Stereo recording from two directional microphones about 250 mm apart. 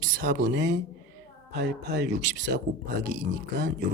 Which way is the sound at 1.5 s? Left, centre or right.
Right.